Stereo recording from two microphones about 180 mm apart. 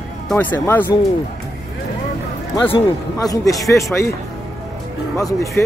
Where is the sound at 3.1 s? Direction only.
15° left (ahead or behind).